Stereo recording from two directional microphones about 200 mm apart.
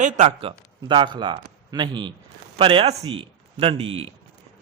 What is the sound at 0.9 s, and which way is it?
Speech, 25° right (ahead or behind).